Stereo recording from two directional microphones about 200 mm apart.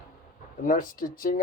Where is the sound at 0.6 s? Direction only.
45° left (ahead or behind).